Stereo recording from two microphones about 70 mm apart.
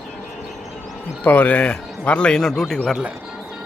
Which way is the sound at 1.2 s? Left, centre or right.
Left.